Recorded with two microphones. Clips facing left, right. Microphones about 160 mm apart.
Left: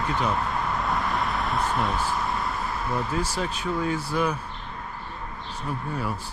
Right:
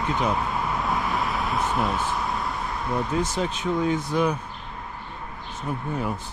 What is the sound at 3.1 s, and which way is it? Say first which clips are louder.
Speech: right 2 dB; 15° right (ahead or behind).